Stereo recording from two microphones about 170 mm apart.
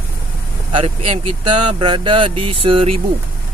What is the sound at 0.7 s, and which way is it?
Speech, 40° right (ahead or behind).